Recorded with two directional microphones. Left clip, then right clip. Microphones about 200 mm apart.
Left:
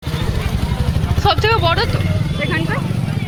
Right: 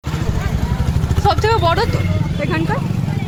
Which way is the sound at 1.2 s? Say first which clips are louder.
Even; 5° right (ahead or behind).